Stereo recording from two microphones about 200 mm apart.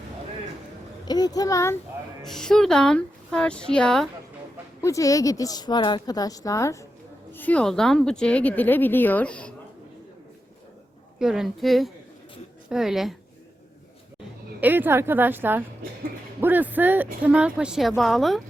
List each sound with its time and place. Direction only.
1.0 s a child's voice: 20° left (ahead or behind)
2.2 s speech: centre (ahead or behind)
4.8 s speech: 15° left (ahead or behind)
11.2 s speech: centre (ahead or behind)
14.6 s a woman's voice: 10° right (ahead or behind)